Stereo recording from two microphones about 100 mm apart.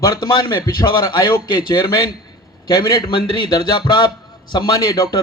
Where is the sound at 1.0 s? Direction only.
50° left (ahead or behind).